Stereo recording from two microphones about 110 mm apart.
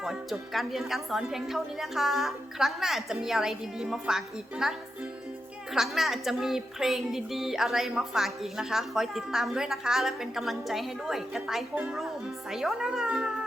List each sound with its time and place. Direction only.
0.0 s speech: centre (ahead or behind)